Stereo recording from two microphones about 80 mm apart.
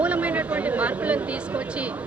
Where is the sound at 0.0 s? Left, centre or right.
Centre.